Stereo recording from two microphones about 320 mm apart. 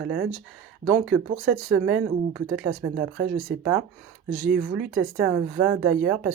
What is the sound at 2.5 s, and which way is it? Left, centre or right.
Speech, right.